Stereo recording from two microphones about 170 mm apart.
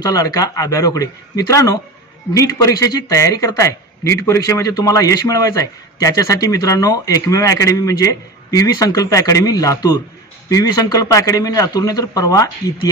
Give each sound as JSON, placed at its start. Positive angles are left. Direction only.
{"t": 0.0, "sound": "a man's voice", "side_deg": 20}